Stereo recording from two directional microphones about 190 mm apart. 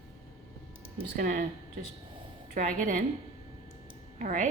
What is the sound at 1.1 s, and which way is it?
Speech, 45° right (ahead or behind).